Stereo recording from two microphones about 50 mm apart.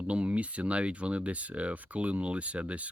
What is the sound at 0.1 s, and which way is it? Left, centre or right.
Speech, right.